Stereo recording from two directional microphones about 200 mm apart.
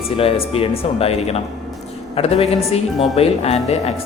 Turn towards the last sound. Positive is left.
turn(degrees=30)  # may be behind; listen again after turning